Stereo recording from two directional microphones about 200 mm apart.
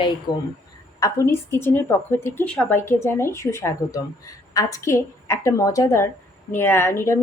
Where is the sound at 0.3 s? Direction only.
20° left (ahead or behind).